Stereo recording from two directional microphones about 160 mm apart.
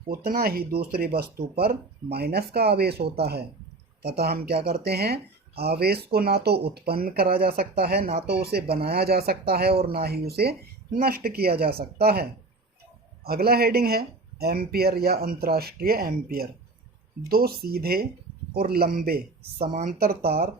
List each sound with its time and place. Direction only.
0.3 s speech: 70° right (ahead or behind)
10.9 s speech: 70° right (ahead or behind)
19.7 s speech: 55° right (ahead or behind); by 20.5 s 75° right (ahead or behind)